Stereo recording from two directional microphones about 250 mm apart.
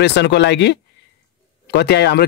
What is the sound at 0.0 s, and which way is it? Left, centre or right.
Speech, left.